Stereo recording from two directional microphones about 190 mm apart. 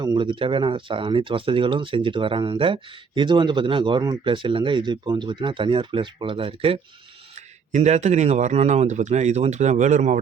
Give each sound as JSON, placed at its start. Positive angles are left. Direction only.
{"t": 0.0, "sound": "speech", "side_deg": -25}